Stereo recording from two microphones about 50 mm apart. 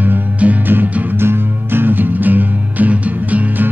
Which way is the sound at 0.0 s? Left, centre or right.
Right.